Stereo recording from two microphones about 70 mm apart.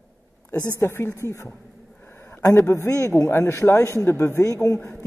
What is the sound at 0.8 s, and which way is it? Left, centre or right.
A woman's voice, left.